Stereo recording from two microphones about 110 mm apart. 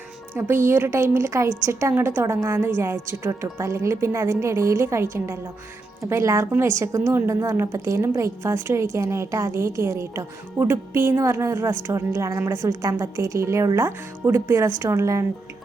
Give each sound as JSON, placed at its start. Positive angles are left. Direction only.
{"t": 0.3, "sound": "a woman's voice", "side_deg": -20}